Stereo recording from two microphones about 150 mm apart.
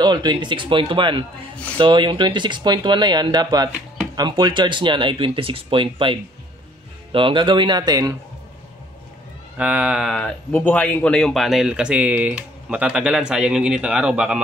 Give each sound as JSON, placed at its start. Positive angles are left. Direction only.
{"t": 0.0, "sound": "speech", "side_deg": -30}
{"t": 9.6, "sound": "speech", "side_deg": -5}